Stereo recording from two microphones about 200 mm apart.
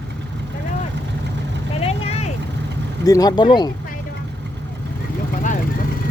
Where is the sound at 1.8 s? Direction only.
30° left (ahead or behind).